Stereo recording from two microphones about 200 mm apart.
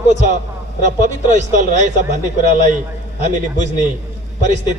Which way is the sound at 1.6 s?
35° right (ahead or behind).